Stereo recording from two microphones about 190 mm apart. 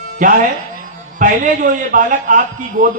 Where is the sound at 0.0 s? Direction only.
45° right (ahead or behind).